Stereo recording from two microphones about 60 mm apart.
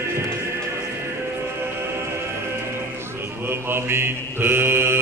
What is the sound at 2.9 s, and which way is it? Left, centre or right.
Mantra, right.